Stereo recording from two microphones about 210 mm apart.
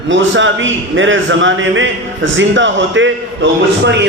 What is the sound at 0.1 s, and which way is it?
A man's voice, 65° right (ahead or behind).